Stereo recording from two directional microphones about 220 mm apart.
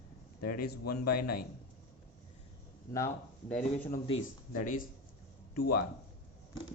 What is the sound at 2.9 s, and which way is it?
Speech, 10° left (ahead or behind).